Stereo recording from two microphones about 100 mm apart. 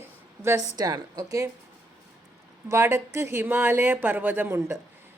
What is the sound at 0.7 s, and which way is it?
Speech, 40° right (ahead or behind).